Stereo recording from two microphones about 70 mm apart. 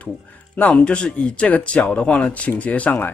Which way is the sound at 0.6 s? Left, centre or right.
Left.